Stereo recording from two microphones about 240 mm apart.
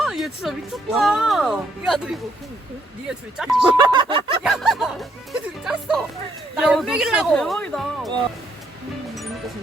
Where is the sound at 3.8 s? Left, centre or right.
Centre.